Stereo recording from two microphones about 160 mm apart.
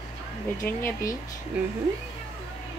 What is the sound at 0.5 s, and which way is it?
Speech, 20° left (ahead or behind).